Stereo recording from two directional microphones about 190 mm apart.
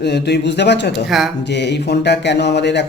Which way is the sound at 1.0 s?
Centre (ahead or behind).